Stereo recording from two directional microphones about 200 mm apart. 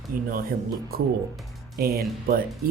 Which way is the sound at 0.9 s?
50° right (ahead or behind).